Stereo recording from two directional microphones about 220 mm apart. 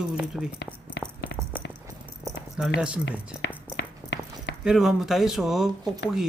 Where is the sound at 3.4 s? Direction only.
50° left (ahead or behind).